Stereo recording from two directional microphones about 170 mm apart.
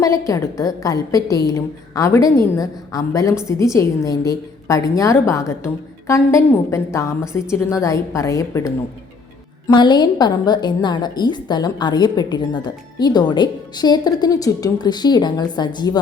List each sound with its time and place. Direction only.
0.0 s a woman's voice: 20° left (ahead or behind)